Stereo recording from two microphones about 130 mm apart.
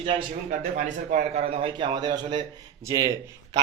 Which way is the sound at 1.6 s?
40° right (ahead or behind).